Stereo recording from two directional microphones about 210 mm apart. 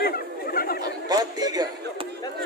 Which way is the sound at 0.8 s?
20° right (ahead or behind).